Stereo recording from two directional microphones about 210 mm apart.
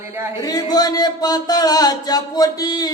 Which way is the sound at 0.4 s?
20° left (ahead or behind).